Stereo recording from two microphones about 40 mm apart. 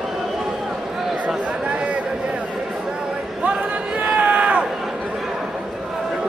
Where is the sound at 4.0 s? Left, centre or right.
Right.